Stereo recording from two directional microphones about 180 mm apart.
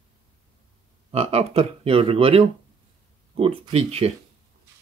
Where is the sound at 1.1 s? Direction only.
35° right (ahead or behind).